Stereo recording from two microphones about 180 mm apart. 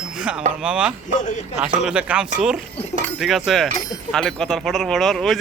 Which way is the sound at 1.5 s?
5° right (ahead or behind).